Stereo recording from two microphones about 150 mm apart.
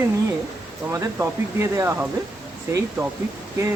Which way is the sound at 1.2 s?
20° right (ahead or behind).